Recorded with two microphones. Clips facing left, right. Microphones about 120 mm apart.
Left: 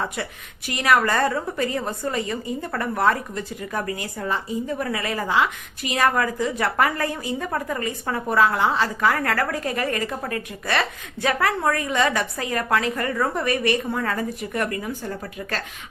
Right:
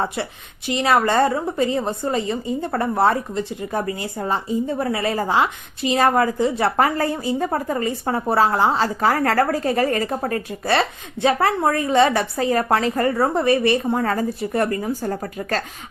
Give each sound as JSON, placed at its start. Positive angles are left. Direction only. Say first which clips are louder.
{"t": 0.0, "sound": "a woman's voice", "louder": "right 4 dB", "side_deg": -25}